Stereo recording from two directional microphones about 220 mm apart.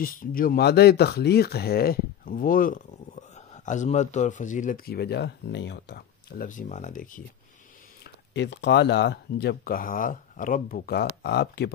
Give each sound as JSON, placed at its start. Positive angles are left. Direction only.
{"t": 0.0, "sound": "speech", "side_deg": 40}
{"t": 8.0, "sound": "speech", "side_deg": 50}